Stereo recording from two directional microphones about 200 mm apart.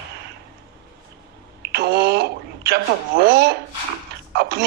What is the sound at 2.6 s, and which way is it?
Speech, 55° right (ahead or behind).